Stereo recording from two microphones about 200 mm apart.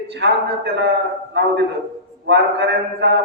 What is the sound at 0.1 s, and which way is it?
A man's voice, 60° right (ahead or behind).